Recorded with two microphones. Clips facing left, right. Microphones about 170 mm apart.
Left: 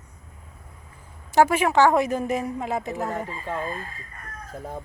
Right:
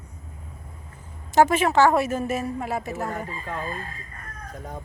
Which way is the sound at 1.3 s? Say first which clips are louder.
Even; 10° left (ahead or behind).